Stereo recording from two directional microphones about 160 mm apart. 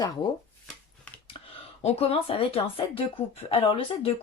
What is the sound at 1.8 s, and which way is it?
Speech, 40° left (ahead or behind).